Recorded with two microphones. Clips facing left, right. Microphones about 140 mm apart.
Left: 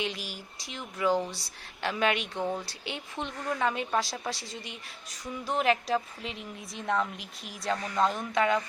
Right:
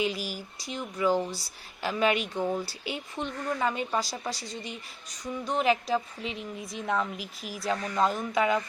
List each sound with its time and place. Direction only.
0.0 s speech: centre (ahead or behind)